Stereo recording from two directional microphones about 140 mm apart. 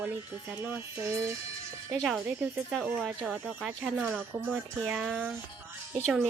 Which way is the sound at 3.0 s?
5° right (ahead or behind).